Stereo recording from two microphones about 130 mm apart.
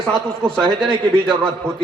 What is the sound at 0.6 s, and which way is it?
Speech, 5° left (ahead or behind).